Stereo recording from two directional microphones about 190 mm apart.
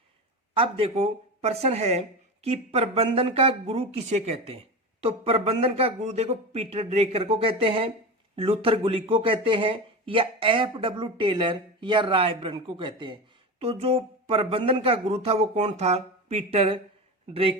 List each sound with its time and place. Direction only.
0.5 s speech: 30° right (ahead or behind)